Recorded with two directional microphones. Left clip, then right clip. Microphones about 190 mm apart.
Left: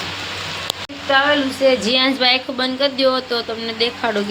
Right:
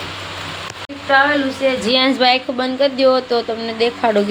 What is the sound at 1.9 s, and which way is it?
Speech, 20° right (ahead or behind).